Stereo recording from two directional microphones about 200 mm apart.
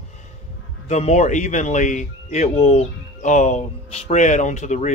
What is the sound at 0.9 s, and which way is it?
Speech, 35° left (ahead or behind).